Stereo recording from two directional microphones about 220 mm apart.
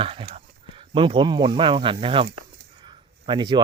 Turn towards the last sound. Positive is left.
turn(degrees=-20)  # may be behind; listen again after turning